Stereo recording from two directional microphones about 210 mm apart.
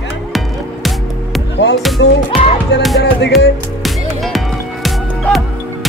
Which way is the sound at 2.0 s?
60° left (ahead or behind).